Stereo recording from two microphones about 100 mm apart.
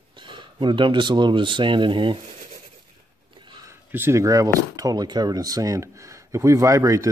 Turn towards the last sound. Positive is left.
turn(degrees=-35)  # may be behind; listen again after turning